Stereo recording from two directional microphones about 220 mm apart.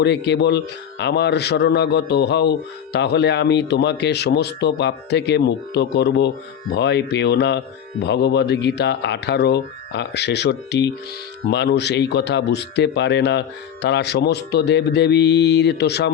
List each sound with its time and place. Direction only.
0.0 s a man's voice: 50° left (ahead or behind)